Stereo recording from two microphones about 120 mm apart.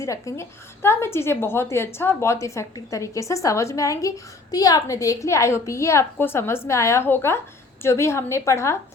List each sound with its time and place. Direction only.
0.0 s a woman's voice: 25° left (ahead or behind)